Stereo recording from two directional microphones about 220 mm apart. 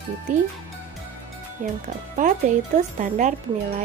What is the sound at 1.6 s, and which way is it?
Speech, 35° right (ahead or behind).